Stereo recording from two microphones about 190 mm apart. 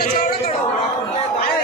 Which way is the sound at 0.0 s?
55° left (ahead or behind).